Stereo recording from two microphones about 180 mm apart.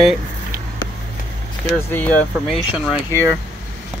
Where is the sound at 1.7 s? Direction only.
10° left (ahead or behind).